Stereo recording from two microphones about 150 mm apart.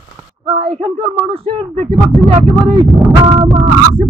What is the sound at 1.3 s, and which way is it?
Speech, 40° right (ahead or behind).